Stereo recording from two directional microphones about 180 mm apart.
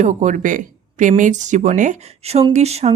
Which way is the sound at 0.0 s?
45° right (ahead or behind).